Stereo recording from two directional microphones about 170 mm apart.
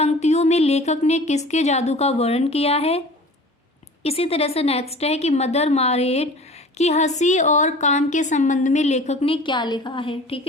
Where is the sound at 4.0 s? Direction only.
35° left (ahead or behind).